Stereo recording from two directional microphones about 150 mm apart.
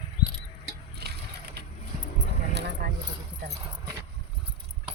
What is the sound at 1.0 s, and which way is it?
Vehicle, 90° right.